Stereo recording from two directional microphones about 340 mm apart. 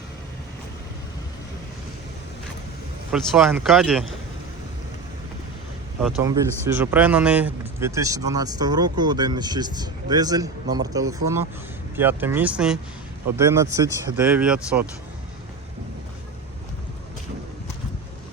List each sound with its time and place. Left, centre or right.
3.1 s speech: centre
6.0 s a man's voice: centre